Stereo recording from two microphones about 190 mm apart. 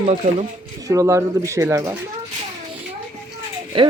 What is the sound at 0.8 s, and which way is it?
Speech, 15° right (ahead or behind).